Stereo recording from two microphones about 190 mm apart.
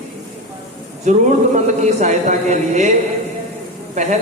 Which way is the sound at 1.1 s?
40° right (ahead or behind).